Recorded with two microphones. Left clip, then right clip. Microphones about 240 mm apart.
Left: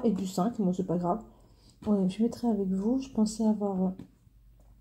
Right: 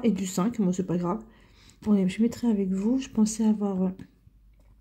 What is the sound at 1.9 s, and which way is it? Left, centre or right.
Speech, right.